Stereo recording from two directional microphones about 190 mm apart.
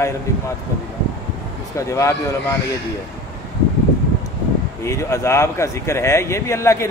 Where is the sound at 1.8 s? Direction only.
15° left (ahead or behind).